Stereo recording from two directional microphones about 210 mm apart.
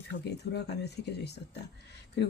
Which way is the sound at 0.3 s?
50° left (ahead or behind).